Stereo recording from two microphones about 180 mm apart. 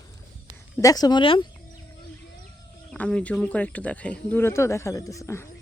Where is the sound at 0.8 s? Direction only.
20° left (ahead or behind).